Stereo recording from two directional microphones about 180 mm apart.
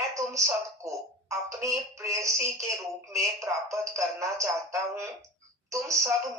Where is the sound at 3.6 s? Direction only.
15° right (ahead or behind).